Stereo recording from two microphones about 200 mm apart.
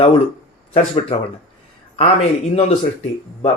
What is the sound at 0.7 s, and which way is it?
A man's voice, 30° left (ahead or behind).